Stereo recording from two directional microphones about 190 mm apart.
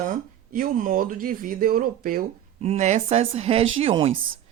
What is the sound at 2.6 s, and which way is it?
Speech, 35° right (ahead or behind).